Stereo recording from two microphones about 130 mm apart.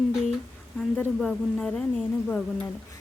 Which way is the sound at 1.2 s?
5° left (ahead or behind).